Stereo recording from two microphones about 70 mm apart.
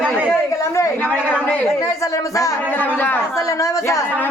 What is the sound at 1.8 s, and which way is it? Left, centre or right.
Speech, left.